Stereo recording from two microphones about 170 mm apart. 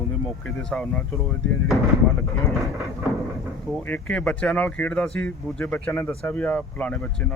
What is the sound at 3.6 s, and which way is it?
Speech, 5° left (ahead or behind).